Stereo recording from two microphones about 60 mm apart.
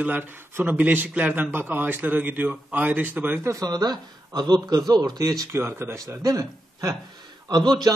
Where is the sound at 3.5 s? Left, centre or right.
Right.